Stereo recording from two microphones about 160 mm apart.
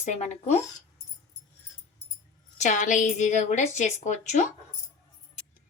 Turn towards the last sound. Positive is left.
turn(degrees=50)  # may be behind; listen again after turning